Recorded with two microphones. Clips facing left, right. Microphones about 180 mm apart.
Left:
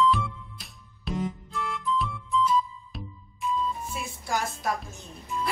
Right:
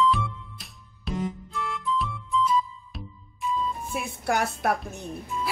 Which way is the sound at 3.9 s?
60° right (ahead or behind).